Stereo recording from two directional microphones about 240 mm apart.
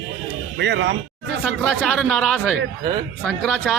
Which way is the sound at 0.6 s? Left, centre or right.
Right.